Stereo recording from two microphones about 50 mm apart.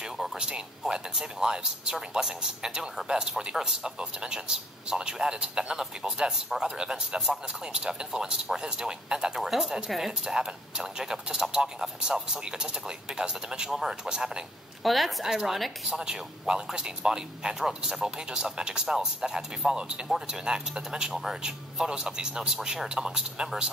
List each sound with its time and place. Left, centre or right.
0.2 s a sound: centre
0.5 s a man's voice: centre
14.8 s a woman's voice: centre